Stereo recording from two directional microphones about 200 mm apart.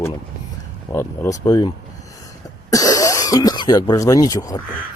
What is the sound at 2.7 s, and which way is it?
Speech, 15° left (ahead or behind).